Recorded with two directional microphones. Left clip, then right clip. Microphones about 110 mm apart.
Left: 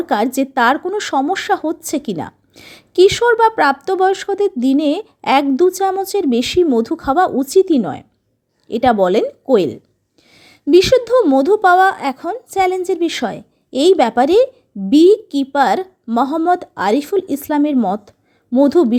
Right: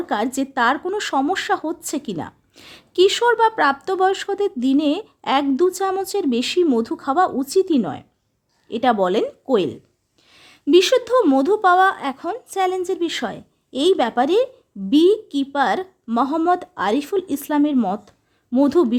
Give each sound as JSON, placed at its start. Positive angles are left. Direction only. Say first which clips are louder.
{"t": 0.0, "sound": "a woman's voice", "louder": "left 6 dB", "side_deg": 35}